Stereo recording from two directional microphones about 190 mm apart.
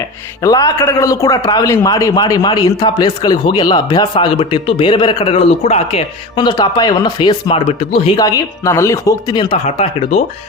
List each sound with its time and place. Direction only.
0.4 s a man's voice: 20° left (ahead or behind)